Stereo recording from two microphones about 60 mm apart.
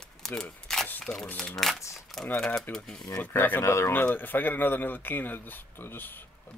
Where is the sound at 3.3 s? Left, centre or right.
Left.